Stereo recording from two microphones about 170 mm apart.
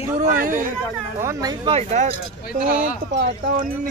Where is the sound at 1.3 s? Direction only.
20° right (ahead or behind).